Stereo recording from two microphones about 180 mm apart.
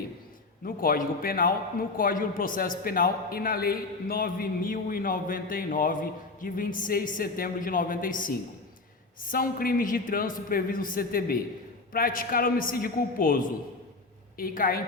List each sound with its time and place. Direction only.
0.6 s a man's voice: 55° left (ahead or behind)